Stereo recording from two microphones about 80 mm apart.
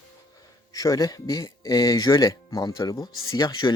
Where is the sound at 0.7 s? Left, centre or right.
Left.